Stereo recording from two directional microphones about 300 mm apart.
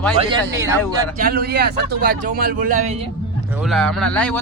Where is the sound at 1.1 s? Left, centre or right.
Right.